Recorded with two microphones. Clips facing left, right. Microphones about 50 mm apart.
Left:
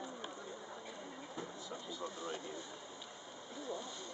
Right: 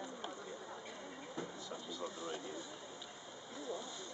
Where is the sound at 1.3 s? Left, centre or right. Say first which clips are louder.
Right 1 dB; centre.